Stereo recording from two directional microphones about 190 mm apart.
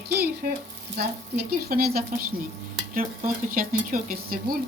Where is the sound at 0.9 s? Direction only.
55° right (ahead or behind).